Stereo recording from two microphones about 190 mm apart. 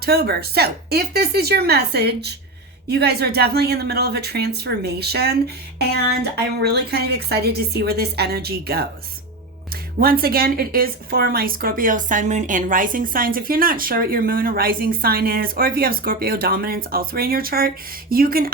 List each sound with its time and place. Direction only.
0.0 s speech: 55° right (ahead or behind)
10.0 s speech: 50° right (ahead or behind)